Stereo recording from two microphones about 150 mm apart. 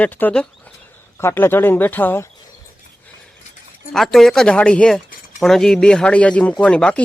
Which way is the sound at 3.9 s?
Centre (ahead or behind).